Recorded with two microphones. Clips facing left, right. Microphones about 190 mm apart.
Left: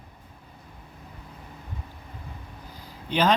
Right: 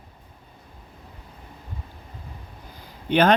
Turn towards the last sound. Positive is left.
turn(degrees=-60)  # may be behind; listen again after turning